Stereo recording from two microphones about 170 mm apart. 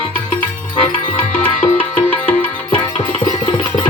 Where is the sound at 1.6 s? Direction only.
10° left (ahead or behind).